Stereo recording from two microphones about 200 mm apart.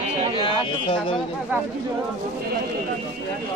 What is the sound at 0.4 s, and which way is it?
Speech, 25° left (ahead or behind).